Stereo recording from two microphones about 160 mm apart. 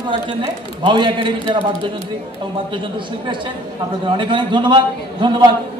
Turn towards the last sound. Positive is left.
turn(degrees=-30)  # may be behind; listen again after turning